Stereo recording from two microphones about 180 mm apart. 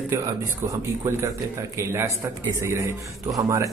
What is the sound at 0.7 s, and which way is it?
Speech, 15° right (ahead or behind).